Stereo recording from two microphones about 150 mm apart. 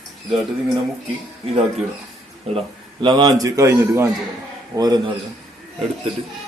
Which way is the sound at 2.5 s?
30° right (ahead or behind).